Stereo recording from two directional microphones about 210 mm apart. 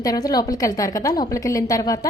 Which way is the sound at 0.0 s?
15° left (ahead or behind).